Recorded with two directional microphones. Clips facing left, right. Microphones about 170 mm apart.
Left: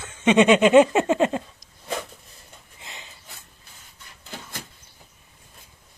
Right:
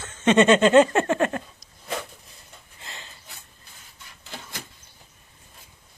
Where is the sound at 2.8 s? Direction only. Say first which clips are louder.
Even; 15° left (ahead or behind).